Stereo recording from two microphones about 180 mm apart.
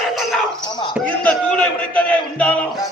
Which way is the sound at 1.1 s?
10° left (ahead or behind).